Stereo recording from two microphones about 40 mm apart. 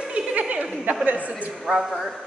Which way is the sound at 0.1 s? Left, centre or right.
Right.